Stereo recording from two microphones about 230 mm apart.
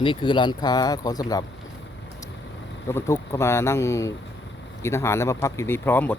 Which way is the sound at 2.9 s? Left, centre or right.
Centre.